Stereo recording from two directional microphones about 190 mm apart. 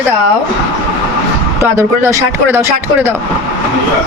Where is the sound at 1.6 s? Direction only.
15° right (ahead or behind).